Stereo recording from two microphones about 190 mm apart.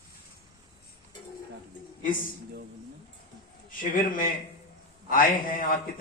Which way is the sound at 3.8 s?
45° left (ahead or behind).